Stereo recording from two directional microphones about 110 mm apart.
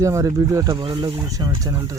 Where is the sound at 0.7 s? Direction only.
45° right (ahead or behind).